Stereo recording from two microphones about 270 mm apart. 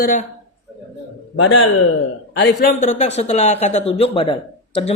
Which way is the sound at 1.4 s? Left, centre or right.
Left.